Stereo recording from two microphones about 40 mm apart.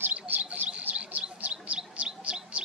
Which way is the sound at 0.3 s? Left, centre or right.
Right.